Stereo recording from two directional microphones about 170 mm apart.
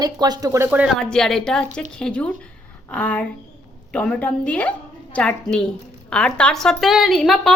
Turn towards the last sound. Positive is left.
turn(degrees=0)  # may be behind; listen again after turning